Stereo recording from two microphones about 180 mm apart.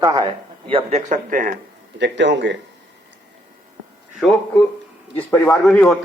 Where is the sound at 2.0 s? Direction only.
80° right.